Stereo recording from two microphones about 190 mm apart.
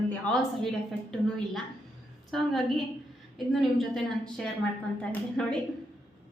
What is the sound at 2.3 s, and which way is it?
A woman's voice, centre (ahead or behind).